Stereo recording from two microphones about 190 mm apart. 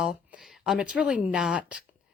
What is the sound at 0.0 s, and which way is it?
Speech, 5° right (ahead or behind).